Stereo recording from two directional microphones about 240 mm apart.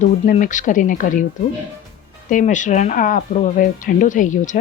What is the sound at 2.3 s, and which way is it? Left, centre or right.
Speech, left.